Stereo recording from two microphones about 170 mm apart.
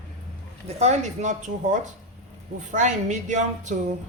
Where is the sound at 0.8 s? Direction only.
40° right (ahead or behind).